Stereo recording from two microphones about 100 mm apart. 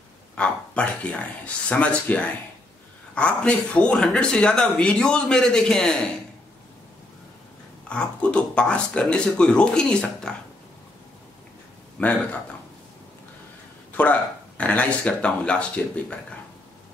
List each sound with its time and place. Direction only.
0.4 s speech: 10° left (ahead or behind)
7.9 s speech: 10° left (ahead or behind)
12.0 s speech: 15° left (ahead or behind)
14.0 s speech: 15° left (ahead or behind)